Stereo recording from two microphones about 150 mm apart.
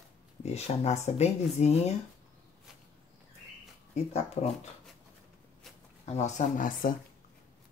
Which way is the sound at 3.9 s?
45° left (ahead or behind).